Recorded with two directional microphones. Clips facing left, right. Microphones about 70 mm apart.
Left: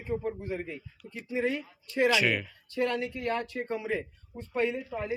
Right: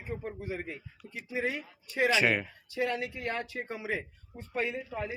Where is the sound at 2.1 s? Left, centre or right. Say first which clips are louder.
Even; right.